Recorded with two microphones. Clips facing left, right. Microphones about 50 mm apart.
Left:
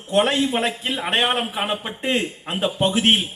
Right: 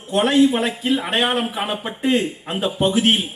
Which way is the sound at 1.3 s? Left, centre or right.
Left.